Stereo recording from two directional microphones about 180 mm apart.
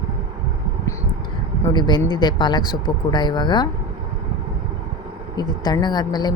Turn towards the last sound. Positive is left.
turn(degrees=25)  # may be behind; listen again after turning